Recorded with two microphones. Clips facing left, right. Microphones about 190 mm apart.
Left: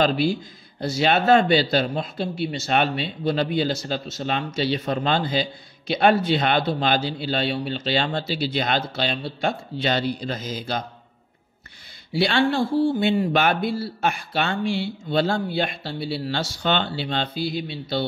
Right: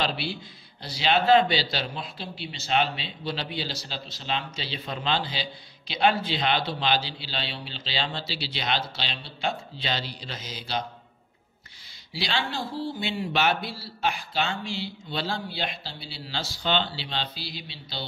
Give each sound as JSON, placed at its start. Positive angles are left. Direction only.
{"t": 0.0, "sound": "a man's voice", "side_deg": 45}
{"t": 12.1, "sound": "a man's voice", "side_deg": 55}